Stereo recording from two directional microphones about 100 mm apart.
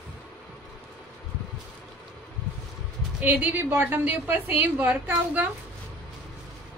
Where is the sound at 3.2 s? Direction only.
15° right (ahead or behind).